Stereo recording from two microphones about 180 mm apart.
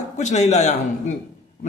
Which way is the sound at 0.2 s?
40° left (ahead or behind).